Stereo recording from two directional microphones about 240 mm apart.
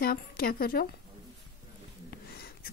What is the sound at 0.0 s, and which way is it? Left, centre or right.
Speech, left.